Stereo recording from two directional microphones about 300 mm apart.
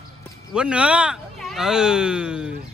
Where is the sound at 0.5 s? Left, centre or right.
Centre.